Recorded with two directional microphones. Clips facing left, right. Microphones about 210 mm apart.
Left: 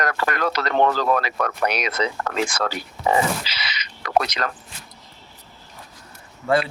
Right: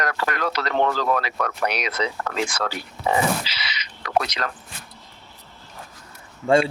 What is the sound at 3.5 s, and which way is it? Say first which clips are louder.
Owl: left 1 dB; 45° left (ahead or behind).